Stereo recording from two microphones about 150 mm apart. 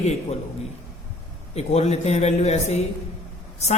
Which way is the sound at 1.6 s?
45° left (ahead or behind).